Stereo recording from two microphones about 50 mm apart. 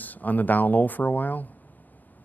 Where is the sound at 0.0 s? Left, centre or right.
Left.